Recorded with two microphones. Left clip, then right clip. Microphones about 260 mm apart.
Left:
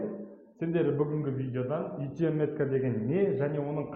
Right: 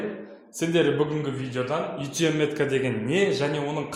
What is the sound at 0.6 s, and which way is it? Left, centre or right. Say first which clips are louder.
Speech: right 6 dB; right.